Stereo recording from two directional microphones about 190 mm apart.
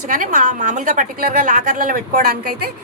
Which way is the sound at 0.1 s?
45° right (ahead or behind).